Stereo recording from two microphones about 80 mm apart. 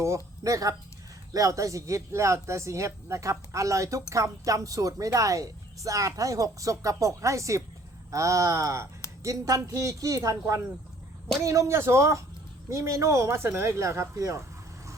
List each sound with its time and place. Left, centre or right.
0.4 s speech: right